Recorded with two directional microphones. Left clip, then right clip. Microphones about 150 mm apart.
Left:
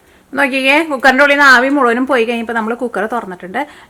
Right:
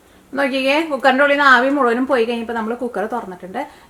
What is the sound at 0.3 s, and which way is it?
A woman's voice, 30° left (ahead or behind).